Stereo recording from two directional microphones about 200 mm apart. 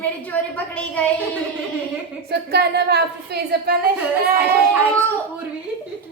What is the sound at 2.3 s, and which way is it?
A woman's voice, 55° right (ahead or behind).